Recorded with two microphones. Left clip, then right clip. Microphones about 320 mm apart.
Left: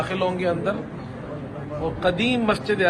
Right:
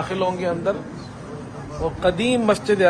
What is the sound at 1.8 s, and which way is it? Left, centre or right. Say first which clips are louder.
Speech: right 2 dB; right.